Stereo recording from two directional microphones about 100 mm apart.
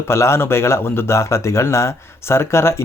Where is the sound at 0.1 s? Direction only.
25° left (ahead or behind).